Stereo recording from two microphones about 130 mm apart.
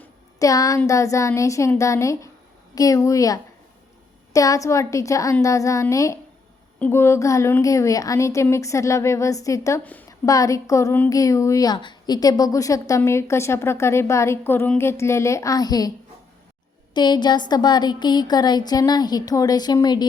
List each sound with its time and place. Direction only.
0.3 s a woman's voice: 25° left (ahead or behind)
9.8 s a woman's voice: 15° left (ahead or behind)
10.1 s a woman's voice: 25° left (ahead or behind)
16.9 s speech: 35° left (ahead or behind)